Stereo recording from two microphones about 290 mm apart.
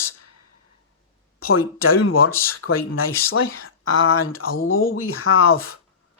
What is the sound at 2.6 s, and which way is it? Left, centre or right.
Speech, left.